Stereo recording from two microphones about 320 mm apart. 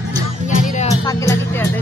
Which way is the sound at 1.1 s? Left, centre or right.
Centre.